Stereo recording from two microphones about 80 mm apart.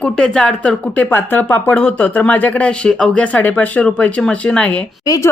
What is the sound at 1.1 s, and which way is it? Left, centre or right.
Speech, left.